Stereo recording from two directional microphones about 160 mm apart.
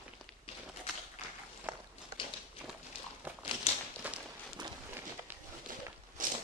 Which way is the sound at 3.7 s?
40° left (ahead or behind).